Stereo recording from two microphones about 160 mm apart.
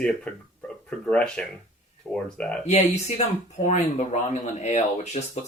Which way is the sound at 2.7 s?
45° left (ahead or behind).